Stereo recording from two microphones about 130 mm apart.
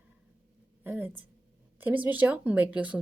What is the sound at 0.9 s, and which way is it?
Speech, 15° right (ahead or behind).